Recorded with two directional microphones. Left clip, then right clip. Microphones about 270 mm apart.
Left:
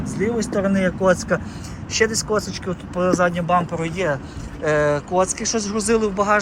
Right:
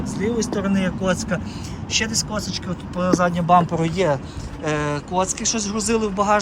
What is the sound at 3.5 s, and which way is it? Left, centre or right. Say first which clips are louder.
Speech: right 3 dB; right.